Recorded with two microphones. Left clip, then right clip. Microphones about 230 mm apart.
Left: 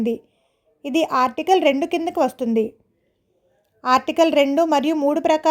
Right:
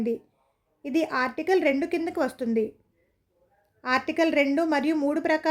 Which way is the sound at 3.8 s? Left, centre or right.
Left.